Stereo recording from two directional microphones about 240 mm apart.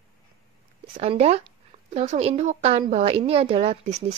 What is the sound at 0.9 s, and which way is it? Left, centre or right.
Speech, right.